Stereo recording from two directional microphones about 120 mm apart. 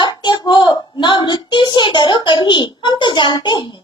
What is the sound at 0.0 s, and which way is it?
A child's voice, 40° left (ahead or behind).